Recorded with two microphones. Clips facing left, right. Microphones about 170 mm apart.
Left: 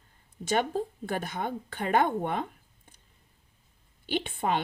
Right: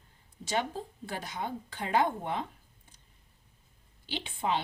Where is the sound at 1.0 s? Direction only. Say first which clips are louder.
Left 5 dB; 55° left (ahead or behind).